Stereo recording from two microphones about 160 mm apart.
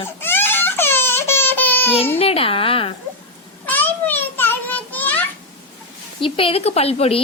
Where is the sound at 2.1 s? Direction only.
35° left (ahead or behind).